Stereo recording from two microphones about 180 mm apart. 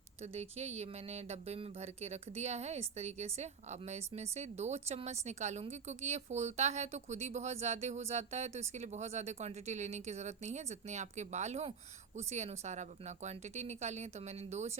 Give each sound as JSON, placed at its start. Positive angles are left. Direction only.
{"t": 0.3, "sound": "a woman's voice", "side_deg": -35}